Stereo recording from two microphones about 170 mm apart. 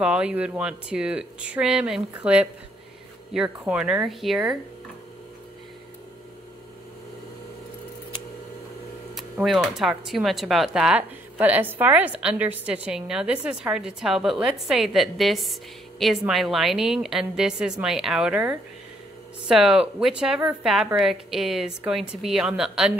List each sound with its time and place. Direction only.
0.0 s speech: 5° right (ahead or behind)
9.1 s speech: centre (ahead or behind)